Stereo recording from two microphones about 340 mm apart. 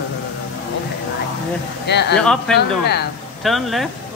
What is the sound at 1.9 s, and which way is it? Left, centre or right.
Speech, left.